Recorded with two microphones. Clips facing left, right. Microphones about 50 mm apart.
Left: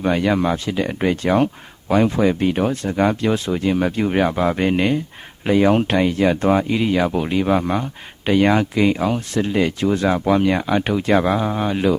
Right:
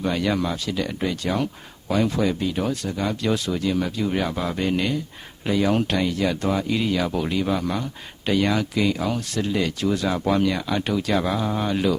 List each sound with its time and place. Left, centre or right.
0.0 s speech: left
3.2 s speech: left
10.2 s speech: centre
10.5 s speech: left